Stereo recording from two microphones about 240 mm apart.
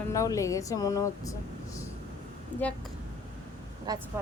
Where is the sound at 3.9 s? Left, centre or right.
Centre.